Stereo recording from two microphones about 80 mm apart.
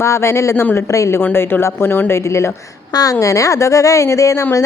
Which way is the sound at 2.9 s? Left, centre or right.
Left.